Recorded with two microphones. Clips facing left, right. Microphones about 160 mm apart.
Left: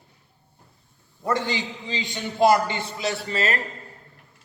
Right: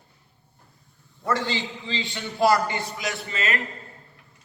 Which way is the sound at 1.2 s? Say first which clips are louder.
Left 1 dB; 20° left (ahead or behind).